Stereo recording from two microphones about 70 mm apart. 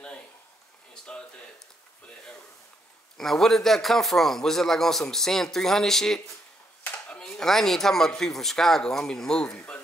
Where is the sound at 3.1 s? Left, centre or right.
Centre.